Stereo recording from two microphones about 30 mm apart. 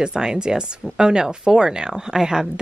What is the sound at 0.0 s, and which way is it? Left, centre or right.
A woman's voice, right.